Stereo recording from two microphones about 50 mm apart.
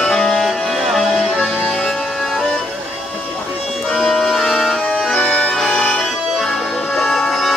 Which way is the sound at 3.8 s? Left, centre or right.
Centre.